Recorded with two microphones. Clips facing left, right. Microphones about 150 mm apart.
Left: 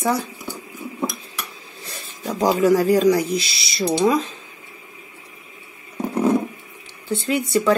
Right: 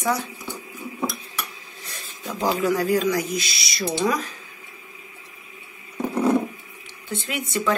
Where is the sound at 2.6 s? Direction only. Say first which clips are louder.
Left 6 dB; 40° left (ahead or behind); by 4.3 s 25° left (ahead or behind).